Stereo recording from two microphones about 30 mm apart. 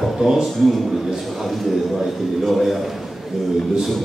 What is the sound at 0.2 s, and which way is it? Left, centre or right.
Speech, centre.